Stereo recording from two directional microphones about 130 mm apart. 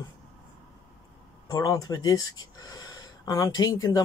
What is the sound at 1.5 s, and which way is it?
Speech, 30° left (ahead or behind).